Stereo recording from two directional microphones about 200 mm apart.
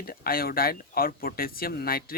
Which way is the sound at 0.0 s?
50° left (ahead or behind).